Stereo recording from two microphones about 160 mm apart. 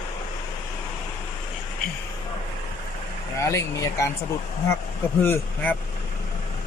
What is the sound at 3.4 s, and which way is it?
Speech, 20° left (ahead or behind).